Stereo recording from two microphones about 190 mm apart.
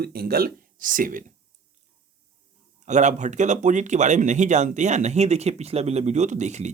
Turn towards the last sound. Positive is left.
turn(degrees=-40)  # may be behind; listen again after turning